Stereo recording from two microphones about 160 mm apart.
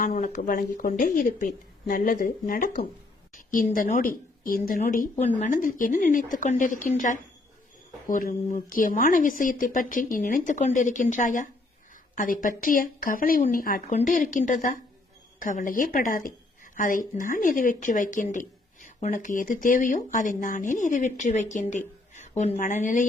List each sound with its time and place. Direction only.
0.0 s a woman's voice: 50° left (ahead or behind)